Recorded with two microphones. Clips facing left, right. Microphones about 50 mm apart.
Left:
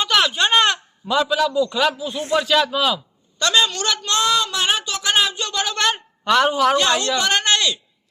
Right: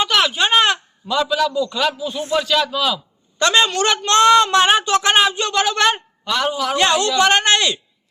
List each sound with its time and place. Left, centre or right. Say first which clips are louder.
0.1 s speech: right 1 dB; centre
1.0 s a man's voice: even; centre
2.4 s speech: left 1 dB; centre
3.3 s speech: right 3 dB; right
6.2 s a man's voice: left 4 dB; left
6.7 s speech: right 3 dB; right